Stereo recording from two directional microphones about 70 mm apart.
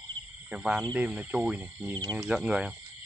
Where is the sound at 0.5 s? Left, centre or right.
Centre.